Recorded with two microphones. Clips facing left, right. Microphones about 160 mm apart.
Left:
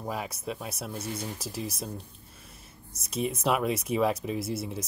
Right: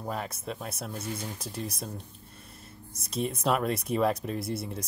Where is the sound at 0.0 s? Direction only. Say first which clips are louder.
Left 1 dB; 5° left (ahead or behind).